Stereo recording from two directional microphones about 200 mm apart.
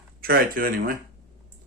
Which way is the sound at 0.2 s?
50° right (ahead or behind).